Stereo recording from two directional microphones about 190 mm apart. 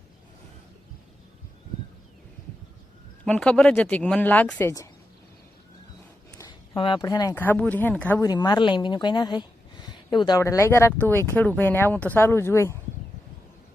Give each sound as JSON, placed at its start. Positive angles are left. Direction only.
{"t": 3.2, "sound": "speech", "side_deg": 5}
{"t": 6.3, "sound": "speech", "side_deg": 20}